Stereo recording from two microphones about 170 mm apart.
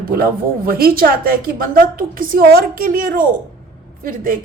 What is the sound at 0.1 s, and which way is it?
A woman's voice, 60° right (ahead or behind).